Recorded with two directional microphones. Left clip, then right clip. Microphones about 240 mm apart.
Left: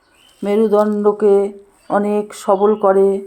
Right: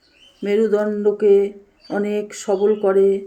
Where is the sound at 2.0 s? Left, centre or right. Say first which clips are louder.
Left 4 dB; centre.